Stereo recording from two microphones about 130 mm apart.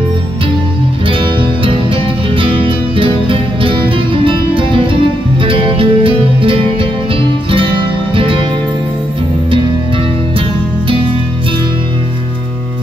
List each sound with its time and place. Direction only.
2.3 s music: 45° right (ahead or behind)